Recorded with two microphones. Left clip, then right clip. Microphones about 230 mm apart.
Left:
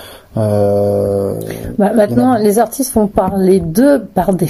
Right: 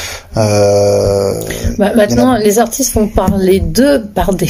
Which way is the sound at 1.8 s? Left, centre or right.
Centre.